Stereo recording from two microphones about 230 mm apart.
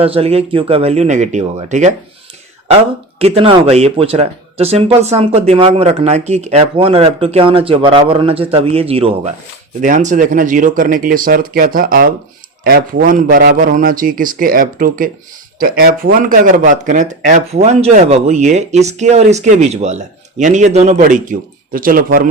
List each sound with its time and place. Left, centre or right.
0.0 s speech: right
3.2 s speech: right